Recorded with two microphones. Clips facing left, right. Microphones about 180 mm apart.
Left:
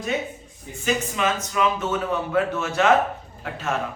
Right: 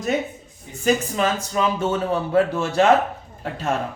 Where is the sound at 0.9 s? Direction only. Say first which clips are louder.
Right 4 dB; 35° right (ahead or behind).